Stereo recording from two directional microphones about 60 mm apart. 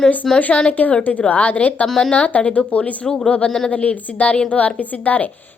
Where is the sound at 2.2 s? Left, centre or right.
Left.